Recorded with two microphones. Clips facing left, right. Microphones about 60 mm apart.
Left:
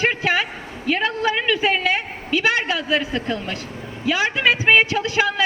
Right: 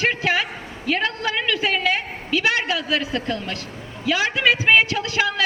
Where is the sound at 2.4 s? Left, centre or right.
Left.